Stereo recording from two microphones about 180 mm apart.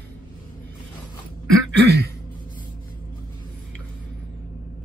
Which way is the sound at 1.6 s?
70° right (ahead or behind).